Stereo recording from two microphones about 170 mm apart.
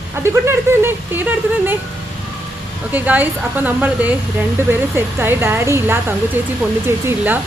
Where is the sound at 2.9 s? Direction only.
10° right (ahead or behind).